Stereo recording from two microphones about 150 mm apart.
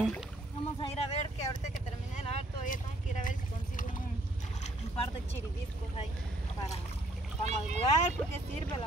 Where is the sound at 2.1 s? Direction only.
55° left (ahead or behind).